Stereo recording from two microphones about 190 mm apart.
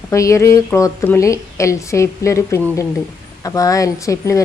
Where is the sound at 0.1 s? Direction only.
15° left (ahead or behind).